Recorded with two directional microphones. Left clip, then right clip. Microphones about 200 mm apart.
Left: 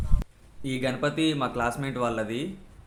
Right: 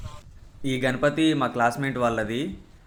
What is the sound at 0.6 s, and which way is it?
Speech, 15° right (ahead or behind).